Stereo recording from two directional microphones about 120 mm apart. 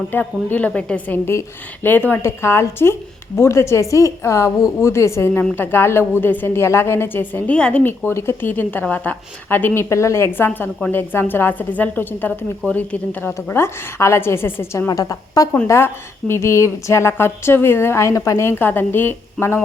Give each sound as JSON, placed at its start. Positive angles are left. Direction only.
{"t": 0.1, "sound": "a woman's voice", "side_deg": 15}